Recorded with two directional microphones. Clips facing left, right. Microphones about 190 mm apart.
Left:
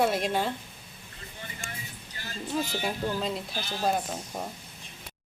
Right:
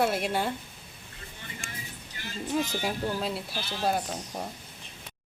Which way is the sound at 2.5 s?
10° right (ahead or behind).